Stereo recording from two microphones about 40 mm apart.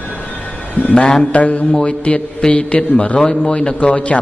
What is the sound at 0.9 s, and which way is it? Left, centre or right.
Speech, centre.